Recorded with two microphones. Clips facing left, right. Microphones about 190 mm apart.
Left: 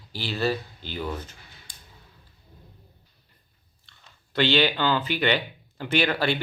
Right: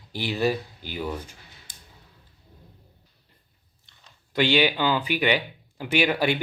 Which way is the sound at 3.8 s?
15° right (ahead or behind).